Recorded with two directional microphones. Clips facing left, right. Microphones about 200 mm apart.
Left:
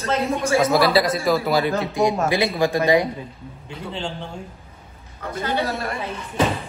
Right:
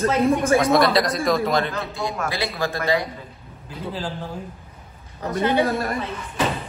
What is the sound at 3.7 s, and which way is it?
Speech, 5° right (ahead or behind).